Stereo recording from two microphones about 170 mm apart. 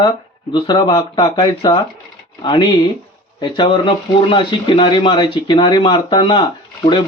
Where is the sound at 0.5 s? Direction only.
25° left (ahead or behind).